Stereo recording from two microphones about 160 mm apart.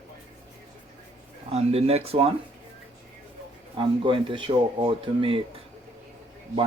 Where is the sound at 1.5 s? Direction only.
40° right (ahead or behind).